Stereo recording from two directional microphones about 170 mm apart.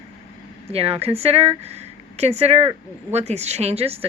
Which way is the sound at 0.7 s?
35° right (ahead or behind).